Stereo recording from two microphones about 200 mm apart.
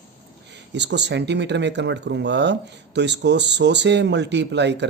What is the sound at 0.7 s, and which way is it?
Speech, 60° right (ahead or behind).